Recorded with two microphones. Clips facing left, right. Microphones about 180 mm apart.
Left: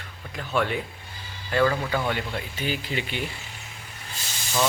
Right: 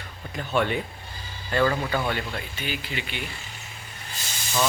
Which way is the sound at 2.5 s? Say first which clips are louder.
Left 6 dB; 40° left (ahead or behind).